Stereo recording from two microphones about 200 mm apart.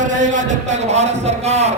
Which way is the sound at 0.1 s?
40° right (ahead or behind).